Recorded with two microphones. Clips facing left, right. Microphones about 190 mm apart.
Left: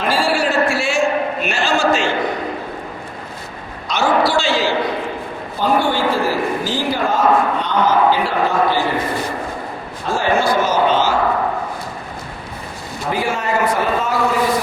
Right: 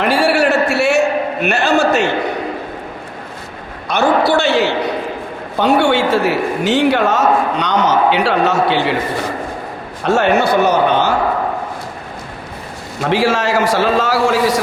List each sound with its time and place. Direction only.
0.0 s a sound: 70° right (ahead or behind)
3.8 s a sound: 60° right (ahead or behind)
4.3 s speech: 60° right (ahead or behind)
5.5 s a man's voice: 75° right (ahead or behind)
10.0 s a man's voice: 70° right (ahead or behind)
13.0 s a man's voice: 90° right